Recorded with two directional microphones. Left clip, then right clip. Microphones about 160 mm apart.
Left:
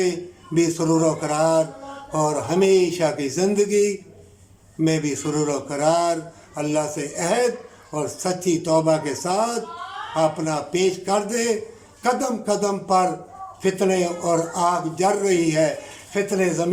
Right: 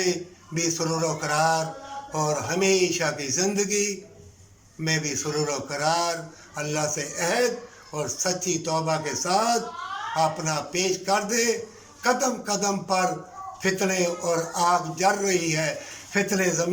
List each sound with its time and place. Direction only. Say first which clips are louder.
0.5 s a man's voice: left 7 dB; 20° left (ahead or behind)